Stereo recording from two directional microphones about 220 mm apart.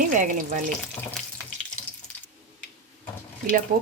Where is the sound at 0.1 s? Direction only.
35° right (ahead or behind).